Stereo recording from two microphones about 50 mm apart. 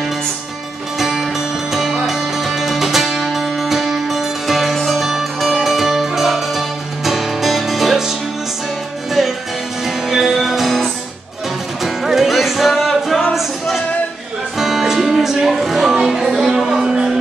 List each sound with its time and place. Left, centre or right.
0.9 s music: centre
10.0 s music: centre